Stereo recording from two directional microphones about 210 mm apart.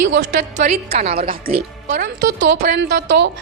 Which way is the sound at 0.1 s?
60° right (ahead or behind).